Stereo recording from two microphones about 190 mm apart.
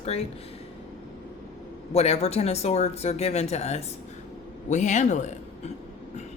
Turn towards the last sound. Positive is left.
turn(degrees=40)  # may be behind; listen again after turning